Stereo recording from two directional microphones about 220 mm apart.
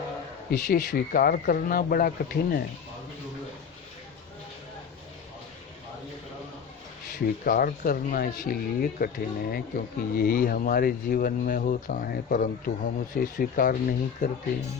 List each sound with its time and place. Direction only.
0.5 s speech: 45° left (ahead or behind)
7.1 s speech: 40° left (ahead or behind)